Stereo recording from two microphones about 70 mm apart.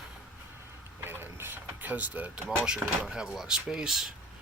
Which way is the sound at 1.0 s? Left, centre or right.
Right.